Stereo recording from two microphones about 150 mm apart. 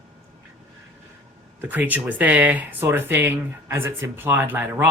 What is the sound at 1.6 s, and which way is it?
Speech, 10° right (ahead or behind).